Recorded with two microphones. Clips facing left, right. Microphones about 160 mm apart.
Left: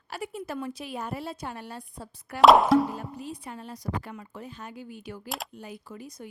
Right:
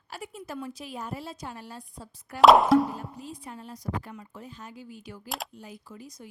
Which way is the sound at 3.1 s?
65° left (ahead or behind).